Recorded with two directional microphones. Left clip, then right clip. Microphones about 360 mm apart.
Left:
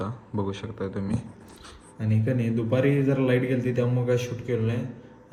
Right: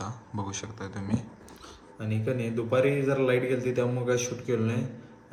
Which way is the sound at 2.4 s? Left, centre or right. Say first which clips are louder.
Even; left.